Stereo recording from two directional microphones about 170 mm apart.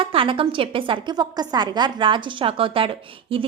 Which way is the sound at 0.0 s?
30° right (ahead or behind).